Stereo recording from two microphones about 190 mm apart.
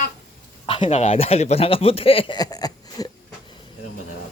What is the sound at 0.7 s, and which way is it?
A man's voice, 30° left (ahead or behind).